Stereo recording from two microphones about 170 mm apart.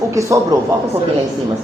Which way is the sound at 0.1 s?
20° right (ahead or behind).